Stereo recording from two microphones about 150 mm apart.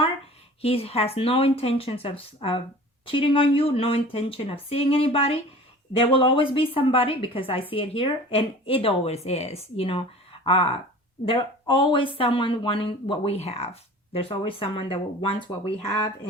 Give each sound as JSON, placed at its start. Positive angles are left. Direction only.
{"t": 0.6, "sound": "speech", "side_deg": 40}